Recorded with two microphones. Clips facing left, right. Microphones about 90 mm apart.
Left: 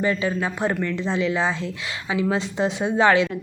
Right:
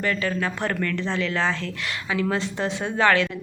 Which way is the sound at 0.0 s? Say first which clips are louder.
Left 2 dB; 20° left (ahead or behind).